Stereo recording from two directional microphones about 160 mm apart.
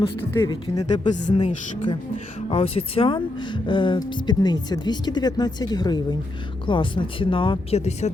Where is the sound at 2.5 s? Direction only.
35° left (ahead or behind).